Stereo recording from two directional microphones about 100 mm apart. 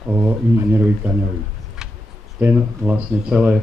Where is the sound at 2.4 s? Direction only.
15° right (ahead or behind).